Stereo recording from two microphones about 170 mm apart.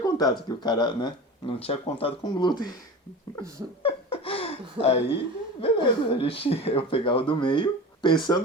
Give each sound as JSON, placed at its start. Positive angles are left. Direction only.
{"t": 0.0, "sound": "speech", "side_deg": 25}
{"t": 3.8, "sound": "laughter", "side_deg": 35}
{"t": 5.5, "sound": "speech", "side_deg": 30}